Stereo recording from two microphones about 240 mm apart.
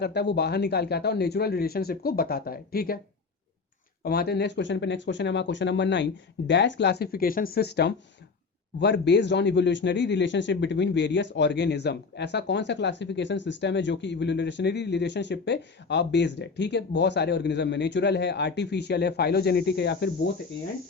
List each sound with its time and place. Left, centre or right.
0.0 s speech: left
4.0 s a man's voice: left